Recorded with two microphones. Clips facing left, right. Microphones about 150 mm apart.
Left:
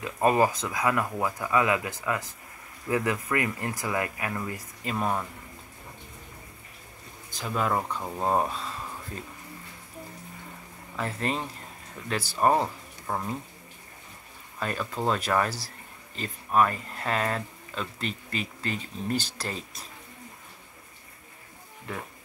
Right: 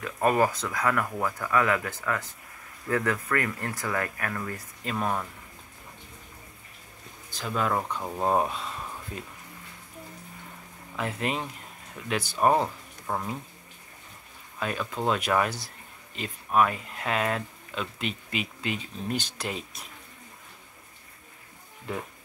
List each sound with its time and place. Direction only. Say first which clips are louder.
0.0 s speech: left 1 dB; 20° left (ahead or behind); by 5.2 s 5° left (ahead or behind)
7.2 s speech: even; 10° left (ahead or behind); by 9.2 s 10° right (ahead or behind)
11.0 s speech: even; 5° right (ahead or behind)
14.6 s speech: even; centre (ahead or behind)
16.2 s speech: even; 5° right (ahead or behind)